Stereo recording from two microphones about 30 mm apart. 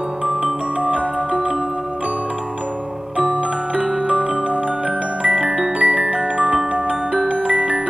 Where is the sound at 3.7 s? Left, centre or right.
Right.